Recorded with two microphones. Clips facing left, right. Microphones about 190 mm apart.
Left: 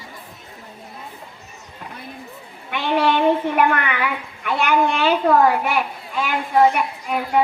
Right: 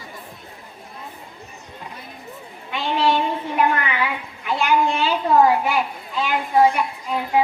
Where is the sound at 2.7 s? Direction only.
60° left (ahead or behind).